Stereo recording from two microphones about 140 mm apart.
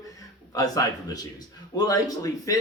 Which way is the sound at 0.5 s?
25° left (ahead or behind).